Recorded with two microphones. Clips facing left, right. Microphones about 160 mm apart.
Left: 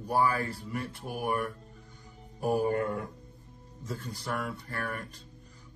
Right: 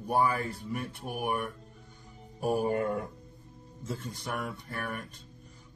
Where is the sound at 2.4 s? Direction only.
20° right (ahead or behind).